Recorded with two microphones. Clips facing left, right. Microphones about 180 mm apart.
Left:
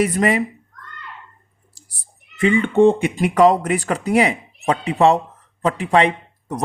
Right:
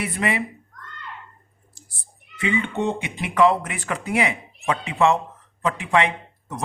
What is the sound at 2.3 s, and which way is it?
A man's voice, 50° left (ahead or behind).